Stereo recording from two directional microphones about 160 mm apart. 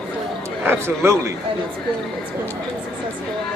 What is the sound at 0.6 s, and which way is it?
Speech, 15° right (ahead or behind).